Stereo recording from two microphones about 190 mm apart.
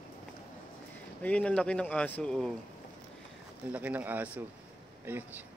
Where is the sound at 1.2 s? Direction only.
5° left (ahead or behind).